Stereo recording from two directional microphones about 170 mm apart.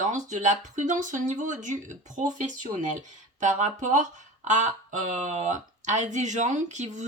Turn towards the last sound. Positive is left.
turn(degrees=-45)  # may be behind; listen again after turning